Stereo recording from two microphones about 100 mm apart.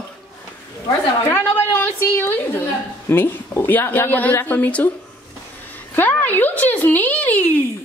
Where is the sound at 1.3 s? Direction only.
25° left (ahead or behind).